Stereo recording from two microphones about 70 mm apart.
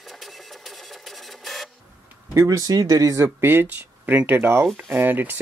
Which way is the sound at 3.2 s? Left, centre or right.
Right.